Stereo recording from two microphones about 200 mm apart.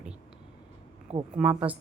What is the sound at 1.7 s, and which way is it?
Speech, 5° right (ahead or behind).